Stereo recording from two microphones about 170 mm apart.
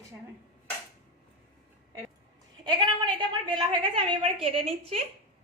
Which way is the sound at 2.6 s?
25° right (ahead or behind).